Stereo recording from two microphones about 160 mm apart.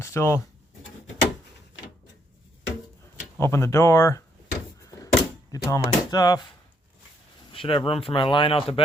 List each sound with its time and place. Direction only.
0.0 s speech: 15° left (ahead or behind)
3.4 s speech: 20° left (ahead or behind)
4.9 s a sound: 20° left (ahead or behind)
7.5 s speech: 35° left (ahead or behind)